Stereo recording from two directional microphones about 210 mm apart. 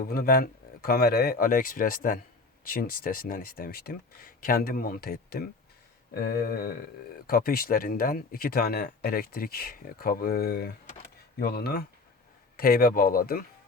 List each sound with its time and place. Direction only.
0.0 s speech: 45° left (ahead or behind)